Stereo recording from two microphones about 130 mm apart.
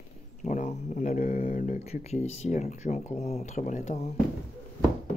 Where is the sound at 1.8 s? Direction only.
55° left (ahead or behind).